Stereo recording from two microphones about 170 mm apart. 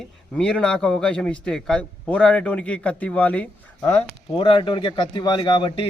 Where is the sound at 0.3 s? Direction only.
5° left (ahead or behind).